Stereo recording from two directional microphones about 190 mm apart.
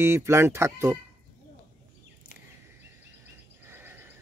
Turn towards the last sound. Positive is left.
turn(degrees=-10)  # may be behind; listen again after turning